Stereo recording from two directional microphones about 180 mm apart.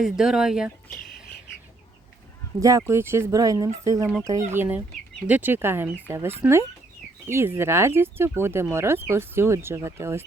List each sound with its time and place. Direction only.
0.0 s speech: centre (ahead or behind)
2.6 s speech: 15° right (ahead or behind)